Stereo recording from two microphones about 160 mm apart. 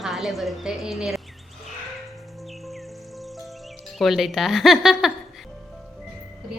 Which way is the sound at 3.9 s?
Centre (ahead or behind).